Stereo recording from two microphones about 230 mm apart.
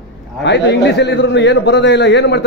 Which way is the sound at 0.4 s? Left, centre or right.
Left.